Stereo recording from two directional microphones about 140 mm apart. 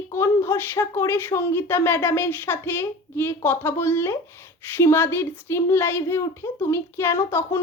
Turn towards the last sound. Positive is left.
turn(degrees=20)  # may be behind; listen again after turning